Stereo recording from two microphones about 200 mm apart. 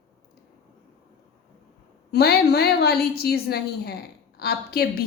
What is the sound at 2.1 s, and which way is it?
A woman's voice, 50° left (ahead or behind).